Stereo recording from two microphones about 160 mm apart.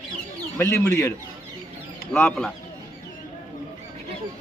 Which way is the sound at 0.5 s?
15° left (ahead or behind).